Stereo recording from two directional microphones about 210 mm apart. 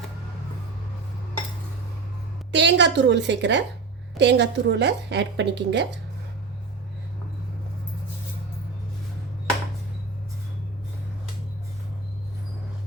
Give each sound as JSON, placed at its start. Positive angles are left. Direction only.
{"t": 2.5, "sound": "a woman's voice", "side_deg": -55}